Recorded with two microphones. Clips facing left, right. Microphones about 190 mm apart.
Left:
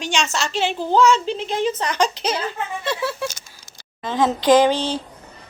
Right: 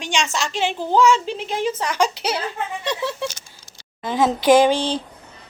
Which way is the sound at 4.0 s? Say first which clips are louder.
Even; 10° right (ahead or behind).